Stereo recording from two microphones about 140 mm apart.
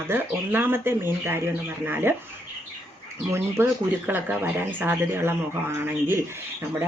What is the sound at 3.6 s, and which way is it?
Speech, 15° right (ahead or behind).